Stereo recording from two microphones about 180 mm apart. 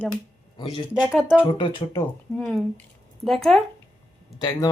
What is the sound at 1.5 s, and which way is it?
Speech, 25° left (ahead or behind).